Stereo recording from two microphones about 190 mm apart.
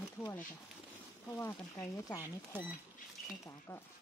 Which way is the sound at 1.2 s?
15° left (ahead or behind).